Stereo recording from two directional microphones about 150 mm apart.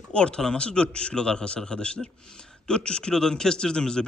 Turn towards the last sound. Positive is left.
turn(degrees=5)  # may be behind; listen again after turning